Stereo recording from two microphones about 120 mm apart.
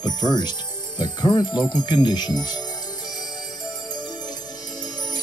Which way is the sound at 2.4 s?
35° left (ahead or behind).